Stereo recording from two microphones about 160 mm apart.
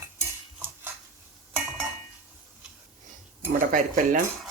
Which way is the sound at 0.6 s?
10° right (ahead or behind).